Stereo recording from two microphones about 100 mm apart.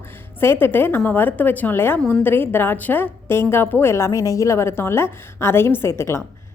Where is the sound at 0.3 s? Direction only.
20° left (ahead or behind).